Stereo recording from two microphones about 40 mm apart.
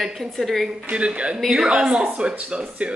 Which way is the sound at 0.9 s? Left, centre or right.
Right.